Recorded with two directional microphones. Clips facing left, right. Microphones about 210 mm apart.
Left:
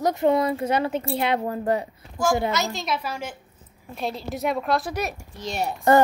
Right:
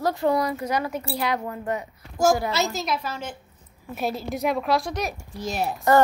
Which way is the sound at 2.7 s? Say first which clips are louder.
Even; centre (ahead or behind).